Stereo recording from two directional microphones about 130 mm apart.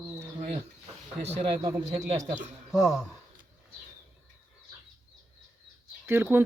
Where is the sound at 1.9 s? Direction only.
60° right (ahead or behind).